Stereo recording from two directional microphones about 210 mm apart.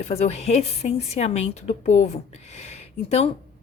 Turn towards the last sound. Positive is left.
turn(degrees=30)  # may be behind; listen again after turning